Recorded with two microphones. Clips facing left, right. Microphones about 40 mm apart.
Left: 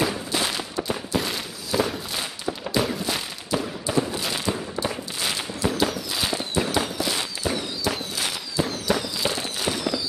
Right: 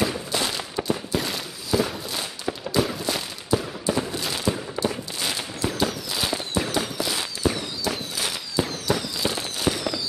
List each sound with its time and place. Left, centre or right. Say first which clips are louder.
0.0 s fireworks: even; centre
1.1 s a sound: left 1 dB; centre
4.8 s fireworks: right 2 dB; right
5.2 s fireworks: left 2 dB; centre
6.8 s firecracker: left 1 dB; centre
8.8 s fireworks: left 1 dB; centre